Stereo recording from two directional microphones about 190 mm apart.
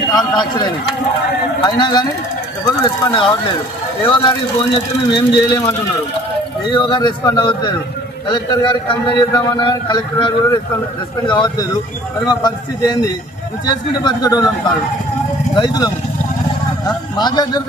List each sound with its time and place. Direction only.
0.1 s speech: 20° left (ahead or behind)
6.7 s speech: 25° left (ahead or behind)
15.5 s speech: 20° left (ahead or behind)